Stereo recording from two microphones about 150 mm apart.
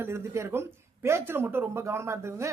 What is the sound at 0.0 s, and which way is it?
Speech, 15° right (ahead or behind).